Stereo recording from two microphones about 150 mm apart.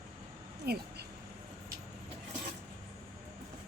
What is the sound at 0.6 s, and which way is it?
Speech, 90° right.